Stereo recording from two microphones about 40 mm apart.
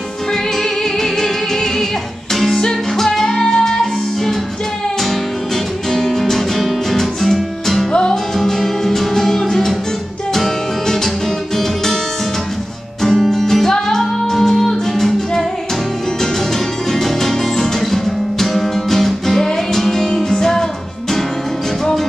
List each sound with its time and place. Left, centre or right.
2.3 s music: centre
5.9 s music: centre
7.9 s music: centre
13.0 s music: centre
17.0 s music: centre